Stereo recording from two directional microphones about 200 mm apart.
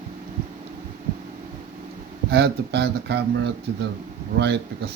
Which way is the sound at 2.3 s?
55° right (ahead or behind).